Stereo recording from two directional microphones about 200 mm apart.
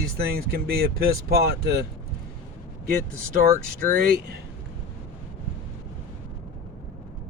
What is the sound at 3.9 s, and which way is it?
Speech, 45° right (ahead or behind).